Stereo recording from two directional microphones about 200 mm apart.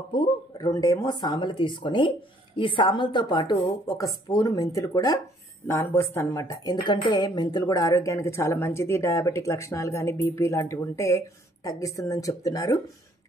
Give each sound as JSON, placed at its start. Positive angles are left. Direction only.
{"t": 0.1, "sound": "a woman's voice", "side_deg": 20}